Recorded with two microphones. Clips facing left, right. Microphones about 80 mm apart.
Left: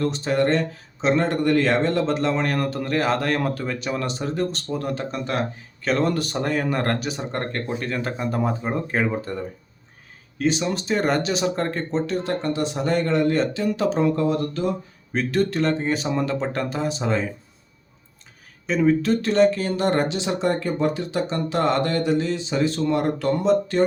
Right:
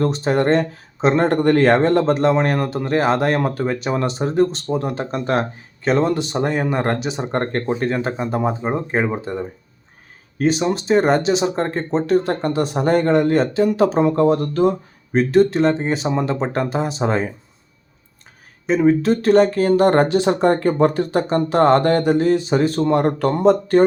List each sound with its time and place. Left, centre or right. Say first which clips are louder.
0.0 s speech: right 3 dB; right
6.1 s speech: right 4 dB; right
10.3 s speech: right 4 dB; right
18.6 s speech: right 4 dB; right
23.4 s speech: right 8 dB; right